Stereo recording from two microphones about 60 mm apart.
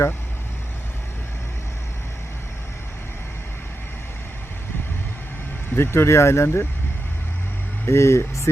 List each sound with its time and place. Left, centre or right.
5.7 s speech: left
7.9 s speech: left